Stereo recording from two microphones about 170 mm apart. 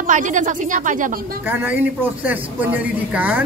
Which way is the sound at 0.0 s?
50° right (ahead or behind).